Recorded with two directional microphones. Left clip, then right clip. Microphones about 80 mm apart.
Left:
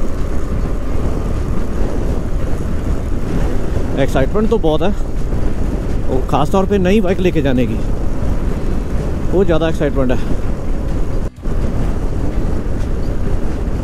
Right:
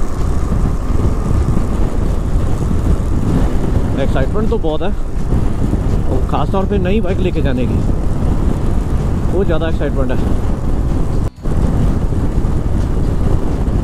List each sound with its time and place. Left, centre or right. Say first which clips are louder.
3.9 s speech: left 4 dB; left
6.3 s speech: left 3 dB; left
9.4 s speech: left 4 dB; left